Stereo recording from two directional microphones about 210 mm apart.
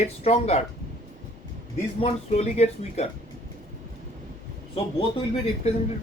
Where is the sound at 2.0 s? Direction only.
30° left (ahead or behind).